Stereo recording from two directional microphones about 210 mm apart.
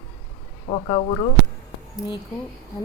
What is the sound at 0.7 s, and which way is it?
Speech, 25° left (ahead or behind).